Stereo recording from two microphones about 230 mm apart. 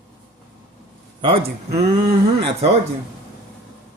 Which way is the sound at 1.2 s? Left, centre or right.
Right.